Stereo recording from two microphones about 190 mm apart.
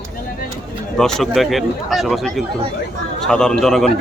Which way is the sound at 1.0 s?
Centre (ahead or behind).